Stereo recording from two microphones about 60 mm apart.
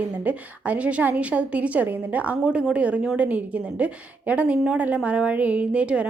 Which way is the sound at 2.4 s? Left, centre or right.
Centre.